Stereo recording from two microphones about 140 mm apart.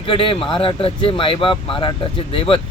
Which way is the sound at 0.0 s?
40° left (ahead or behind).